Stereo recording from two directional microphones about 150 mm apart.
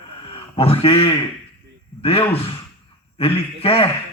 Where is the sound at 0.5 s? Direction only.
40° left (ahead or behind).